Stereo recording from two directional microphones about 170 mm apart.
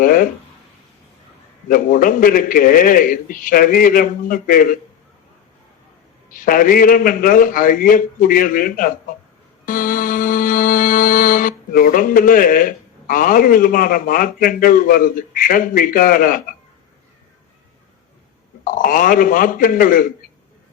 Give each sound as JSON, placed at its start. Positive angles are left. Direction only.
{"t": 0.0, "sound": "a man's voice", "side_deg": 55}
{"t": 1.6, "sound": "a man's voice", "side_deg": 55}
{"t": 6.3, "sound": "a man's voice", "side_deg": 55}
{"t": 9.6, "sound": "music", "side_deg": 55}
{"t": 18.6, "sound": "a man's voice", "side_deg": 55}